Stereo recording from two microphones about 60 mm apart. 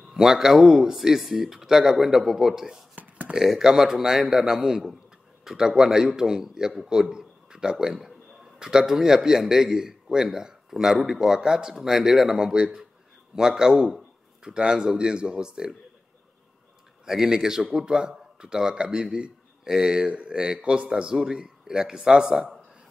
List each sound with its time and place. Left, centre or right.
0.1 s a man's voice: centre
3.0 s a sound: right
3.3 s a man's voice: centre
17.0 s a man's voice: centre